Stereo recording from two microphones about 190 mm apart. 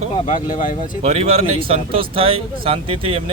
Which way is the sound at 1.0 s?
35° right (ahead or behind).